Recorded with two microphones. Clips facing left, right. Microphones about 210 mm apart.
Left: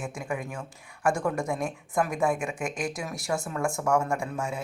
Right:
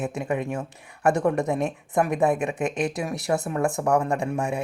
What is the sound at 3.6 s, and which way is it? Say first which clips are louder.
Speech: right 2 dB; 35° right (ahead or behind).